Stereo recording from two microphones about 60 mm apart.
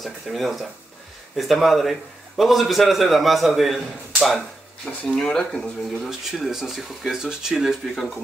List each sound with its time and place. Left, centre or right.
0.0 s a man's voice: centre
6.0 s a man's voice: centre